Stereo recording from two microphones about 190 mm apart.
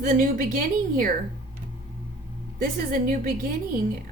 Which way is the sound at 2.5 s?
50° right (ahead or behind).